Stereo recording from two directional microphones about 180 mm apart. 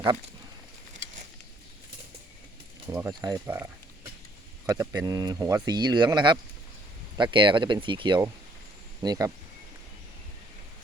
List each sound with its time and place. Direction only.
2.9 s speech: 20° right (ahead or behind)
4.7 s speech: 20° right (ahead or behind)